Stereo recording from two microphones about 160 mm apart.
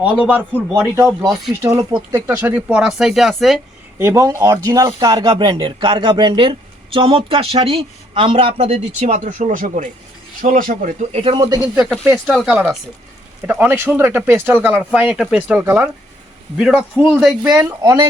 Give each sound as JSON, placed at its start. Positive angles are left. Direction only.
{"t": 0.0, "sound": "speech", "side_deg": -10}
{"t": 3.9, "sound": "a man's voice", "side_deg": -15}
{"t": 11.1, "sound": "speech", "side_deg": -35}
{"t": 11.3, "sound": "speech", "side_deg": -20}
{"t": 11.7, "sound": "speech", "side_deg": 0}
{"t": 17.8, "sound": "speech", "side_deg": -20}